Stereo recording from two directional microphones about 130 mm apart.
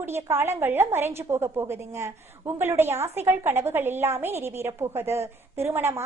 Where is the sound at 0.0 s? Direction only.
20° right (ahead or behind).